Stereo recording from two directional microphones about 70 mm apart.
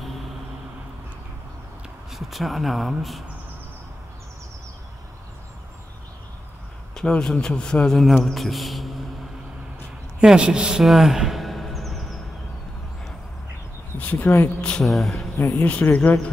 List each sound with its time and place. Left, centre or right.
2.0 s speech: centre
7.0 s a man's voice: centre
10.2 s speech: centre
13.9 s speech: left
14.6 s a man's voice: centre
14.9 s speech: centre
15.6 s speech: left